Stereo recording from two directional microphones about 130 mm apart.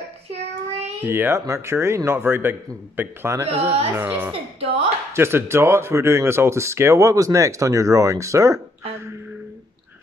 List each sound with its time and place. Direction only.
0.3 s child singing: 55° right (ahead or behind)
1.0 s a child's voice: 20° right (ahead or behind)
4.3 s speech: 50° right (ahead or behind)
5.1 s speech: 20° right (ahead or behind)